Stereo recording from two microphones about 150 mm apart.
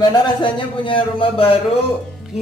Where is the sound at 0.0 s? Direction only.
35° left (ahead or behind).